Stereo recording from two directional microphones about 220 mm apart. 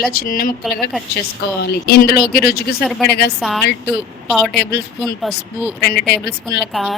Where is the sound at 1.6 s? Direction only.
45° left (ahead or behind).